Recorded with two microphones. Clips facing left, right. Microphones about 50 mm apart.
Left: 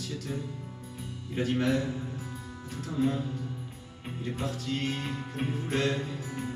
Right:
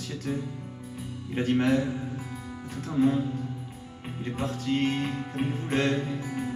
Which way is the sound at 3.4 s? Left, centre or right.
Centre.